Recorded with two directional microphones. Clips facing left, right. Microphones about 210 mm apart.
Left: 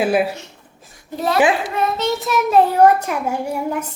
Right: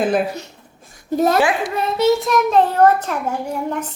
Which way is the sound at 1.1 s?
45° right (ahead or behind).